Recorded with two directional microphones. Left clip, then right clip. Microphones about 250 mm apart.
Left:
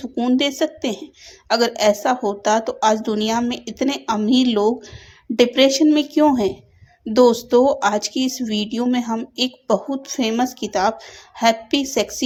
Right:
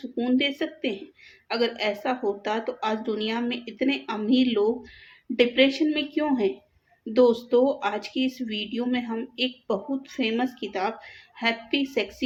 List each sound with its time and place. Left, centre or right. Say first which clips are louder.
0.2 s a woman's voice: left 6 dB; left